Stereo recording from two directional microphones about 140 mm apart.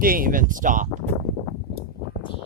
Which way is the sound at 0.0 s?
90° right.